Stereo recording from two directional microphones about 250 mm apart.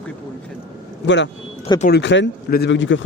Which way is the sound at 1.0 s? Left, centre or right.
Left.